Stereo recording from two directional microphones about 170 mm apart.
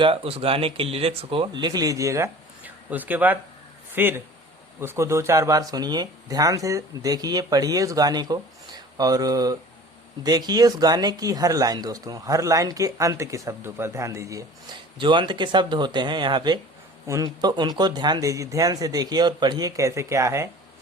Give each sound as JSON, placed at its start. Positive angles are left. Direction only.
{"t": 0.0, "sound": "speech", "side_deg": -35}
{"t": 14.9, "sound": "speech", "side_deg": -30}